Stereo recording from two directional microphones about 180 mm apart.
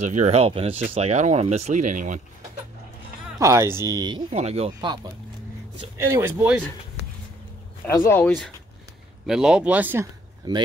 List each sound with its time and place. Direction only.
0.0 s speech: 40° right (ahead or behind)
3.3 s speech: 15° right (ahead or behind)
4.3 s speech: 35° right (ahead or behind)
5.9 s speech: 15° right (ahead or behind)
7.8 s speech: 15° left (ahead or behind)
9.2 s speech: 5° right (ahead or behind)
10.5 s speech: 20° right (ahead or behind)